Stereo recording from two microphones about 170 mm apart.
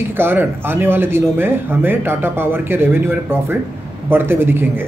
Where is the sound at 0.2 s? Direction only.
15° right (ahead or behind).